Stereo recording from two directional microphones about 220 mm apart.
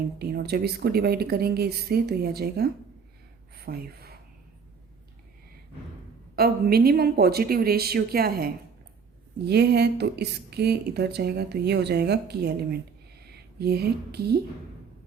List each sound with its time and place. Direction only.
0.2 s speech: 45° right (ahead or behind)
3.5 s gasp: 45° right (ahead or behind)
6.3 s speech: 45° right (ahead or behind)
9.5 s speech: 50° right (ahead or behind)